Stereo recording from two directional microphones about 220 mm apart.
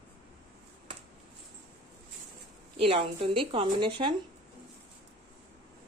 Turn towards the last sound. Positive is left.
turn(degrees=-20)  # may be behind; listen again after turning